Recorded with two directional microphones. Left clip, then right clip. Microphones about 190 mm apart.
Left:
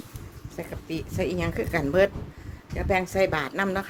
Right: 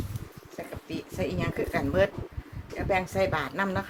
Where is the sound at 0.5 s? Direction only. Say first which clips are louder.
Left 3 dB; 45° left (ahead or behind).